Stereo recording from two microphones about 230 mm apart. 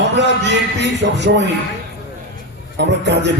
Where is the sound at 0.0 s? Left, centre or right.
Right.